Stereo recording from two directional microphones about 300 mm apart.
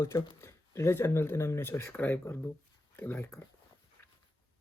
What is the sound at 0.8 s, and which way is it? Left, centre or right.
Speech, centre.